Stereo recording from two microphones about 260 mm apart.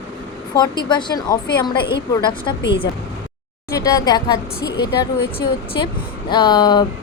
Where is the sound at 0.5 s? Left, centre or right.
Centre.